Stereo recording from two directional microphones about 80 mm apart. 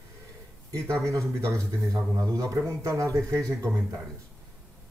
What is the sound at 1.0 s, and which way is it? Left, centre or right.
Speech, right.